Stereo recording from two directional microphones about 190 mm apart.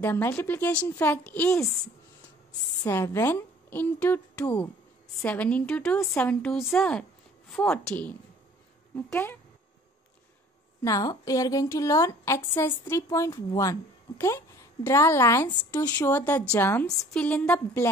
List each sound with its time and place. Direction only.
0.0 s speech: 10° left (ahead or behind)
2.8 s a woman's voice: 15° left (ahead or behind)
10.8 s speech: 20° left (ahead or behind)